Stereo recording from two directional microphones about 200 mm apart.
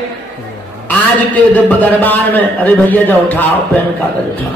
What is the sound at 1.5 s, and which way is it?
A man's voice, 10° left (ahead or behind).